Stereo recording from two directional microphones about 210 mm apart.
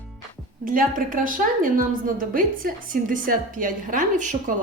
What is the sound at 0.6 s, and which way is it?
A woman's voice, 40° right (ahead or behind).